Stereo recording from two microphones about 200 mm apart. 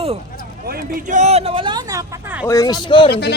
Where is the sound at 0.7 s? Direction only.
45° right (ahead or behind); by 2.5 s 10° right (ahead or behind).